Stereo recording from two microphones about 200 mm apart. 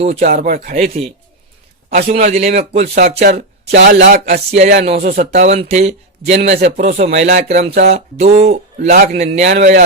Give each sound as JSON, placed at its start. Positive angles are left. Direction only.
{"t": 0.0, "sound": "speech", "side_deg": -35}
{"t": 1.9, "sound": "speech", "side_deg": -45}
{"t": 3.2, "sound": "speech", "side_deg": -50}